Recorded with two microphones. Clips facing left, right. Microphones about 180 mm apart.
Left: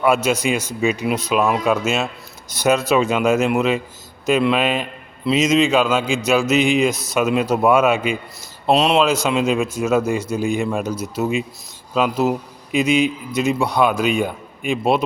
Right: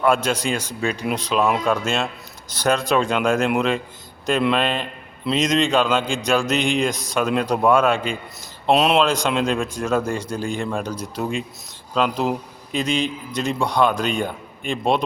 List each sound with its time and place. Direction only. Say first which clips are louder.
0.0 s a man's voice: left 2 dB; 5° left (ahead or behind)